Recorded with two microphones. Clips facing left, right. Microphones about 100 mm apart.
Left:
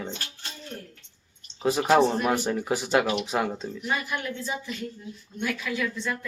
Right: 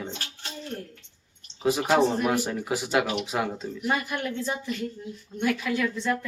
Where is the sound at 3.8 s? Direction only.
55° right (ahead or behind).